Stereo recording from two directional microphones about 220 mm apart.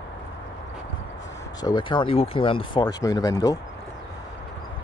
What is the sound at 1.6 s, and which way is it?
Speech, 20° left (ahead or behind).